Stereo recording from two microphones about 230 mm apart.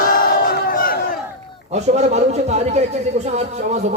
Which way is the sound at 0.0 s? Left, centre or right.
Left.